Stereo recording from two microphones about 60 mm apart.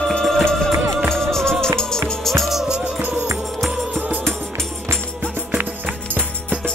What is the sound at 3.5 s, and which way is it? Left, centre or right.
Music, centre.